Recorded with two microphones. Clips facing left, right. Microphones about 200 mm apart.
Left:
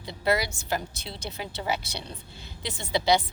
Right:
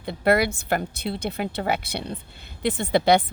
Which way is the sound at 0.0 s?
55° right (ahead or behind).